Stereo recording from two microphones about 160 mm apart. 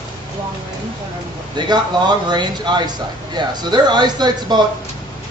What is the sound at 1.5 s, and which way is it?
Speech, 30° right (ahead or behind).